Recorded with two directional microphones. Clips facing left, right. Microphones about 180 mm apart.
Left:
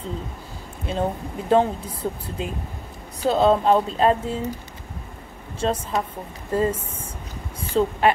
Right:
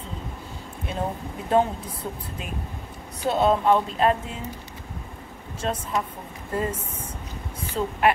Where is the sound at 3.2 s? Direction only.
30° left (ahead or behind).